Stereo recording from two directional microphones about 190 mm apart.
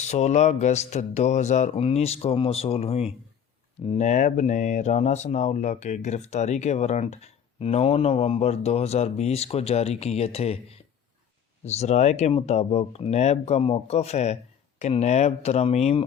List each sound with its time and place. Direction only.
0.0 s speech: 35° left (ahead or behind)